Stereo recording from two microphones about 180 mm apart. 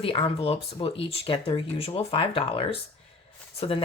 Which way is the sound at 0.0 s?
30° left (ahead or behind).